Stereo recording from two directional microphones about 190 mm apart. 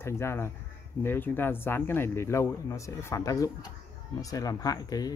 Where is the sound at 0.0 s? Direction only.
15° left (ahead or behind).